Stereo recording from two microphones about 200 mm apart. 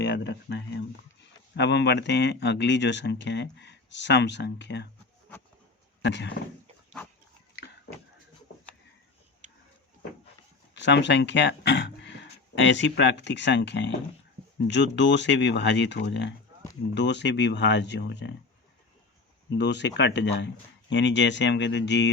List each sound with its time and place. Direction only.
0.0 s speech: 60° left (ahead or behind)
6.0 s speech: 60° left (ahead or behind)
10.8 s speech: 60° left (ahead or behind)
19.5 s speech: 60° left (ahead or behind)